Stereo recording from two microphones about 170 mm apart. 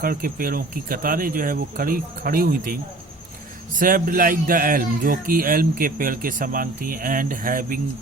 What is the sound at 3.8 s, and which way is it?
Speech, 55° right (ahead or behind).